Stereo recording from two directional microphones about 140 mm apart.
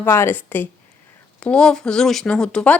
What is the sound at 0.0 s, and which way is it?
Speech, 15° left (ahead or behind).